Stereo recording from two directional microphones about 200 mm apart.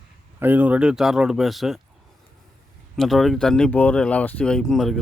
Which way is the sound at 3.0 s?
Centre (ahead or behind).